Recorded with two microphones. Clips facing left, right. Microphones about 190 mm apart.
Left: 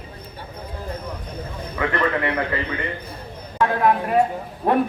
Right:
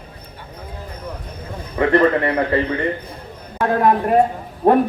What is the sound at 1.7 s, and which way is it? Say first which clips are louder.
Speech: right 8 dB; 35° right (ahead or behind).